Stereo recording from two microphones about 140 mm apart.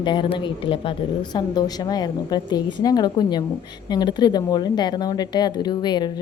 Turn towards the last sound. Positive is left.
turn(degrees=30)  # may be behind; listen again after turning